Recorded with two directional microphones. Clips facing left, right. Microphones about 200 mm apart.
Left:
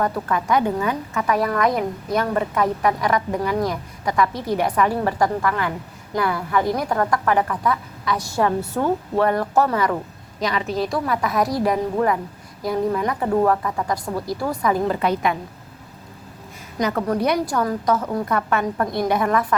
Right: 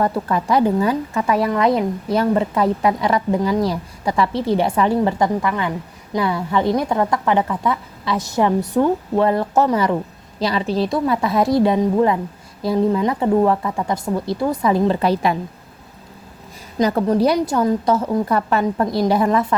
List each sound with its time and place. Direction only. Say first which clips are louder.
0.0 s a woman's voice: right 3 dB; 30° right (ahead or behind)
16.7 s a woman's voice: right 5 dB; 25° right (ahead or behind)